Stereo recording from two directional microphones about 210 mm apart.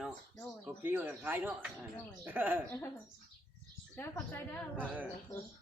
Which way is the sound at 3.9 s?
10° left (ahead or behind).